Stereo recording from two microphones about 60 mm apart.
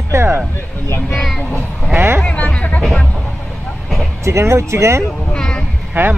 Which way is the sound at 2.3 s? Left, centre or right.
Left.